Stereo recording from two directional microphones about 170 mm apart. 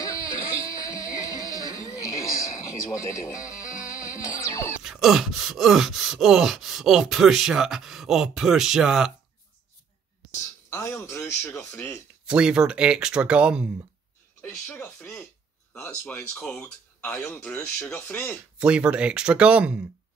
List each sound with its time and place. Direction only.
0.7 s music: 20° left (ahead or behind)
4.8 s wail: 5° right (ahead or behind)
10.7 s speech: 15° left (ahead or behind)
12.3 s wail: 5° right (ahead or behind)
14.4 s speech: 10° left (ahead or behind)
18.6 s speech: 5° right (ahead or behind)